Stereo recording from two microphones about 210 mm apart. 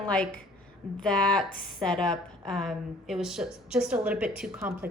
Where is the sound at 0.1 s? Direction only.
5° left (ahead or behind).